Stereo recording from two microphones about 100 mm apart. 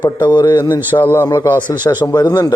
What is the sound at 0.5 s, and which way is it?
Speech, 25° left (ahead or behind).